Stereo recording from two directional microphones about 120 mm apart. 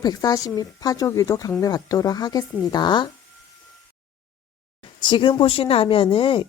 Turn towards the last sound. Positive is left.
turn(degrees=50)  # may be behind; listen again after turning